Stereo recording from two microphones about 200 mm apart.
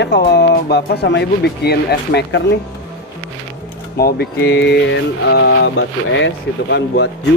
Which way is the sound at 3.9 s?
50° left (ahead or behind).